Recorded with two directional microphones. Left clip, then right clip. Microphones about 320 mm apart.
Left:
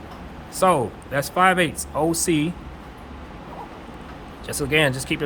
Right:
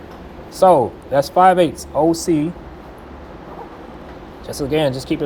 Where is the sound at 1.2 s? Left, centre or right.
Centre.